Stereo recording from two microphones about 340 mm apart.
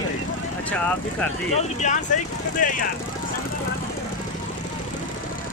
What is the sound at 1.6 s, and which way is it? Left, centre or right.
Speech, left.